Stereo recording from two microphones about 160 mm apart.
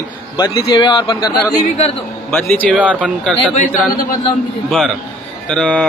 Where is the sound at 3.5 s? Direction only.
50° left (ahead or behind).